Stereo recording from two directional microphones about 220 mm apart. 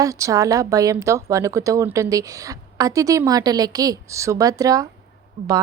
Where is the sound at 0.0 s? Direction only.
15° right (ahead or behind).